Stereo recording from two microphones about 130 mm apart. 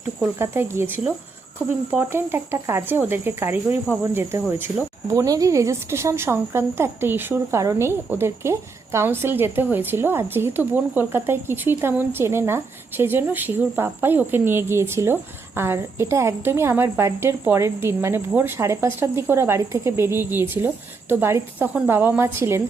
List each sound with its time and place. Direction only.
0.3 s speech: 20° right (ahead or behind)
5.1 s speech: 25° right (ahead or behind)